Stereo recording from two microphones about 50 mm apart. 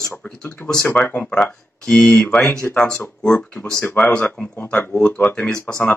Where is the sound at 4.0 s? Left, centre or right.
Left.